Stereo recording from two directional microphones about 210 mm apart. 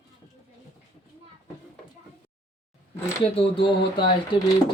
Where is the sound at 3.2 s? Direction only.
25° left (ahead or behind).